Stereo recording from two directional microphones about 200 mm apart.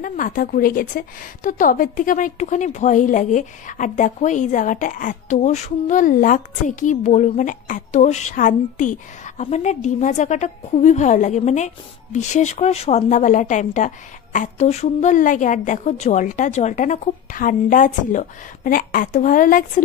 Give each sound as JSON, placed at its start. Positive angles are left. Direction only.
{"t": 0.0, "sound": "speech", "side_deg": 45}